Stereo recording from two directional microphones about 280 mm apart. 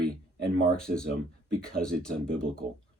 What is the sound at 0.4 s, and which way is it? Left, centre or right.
Speech, centre.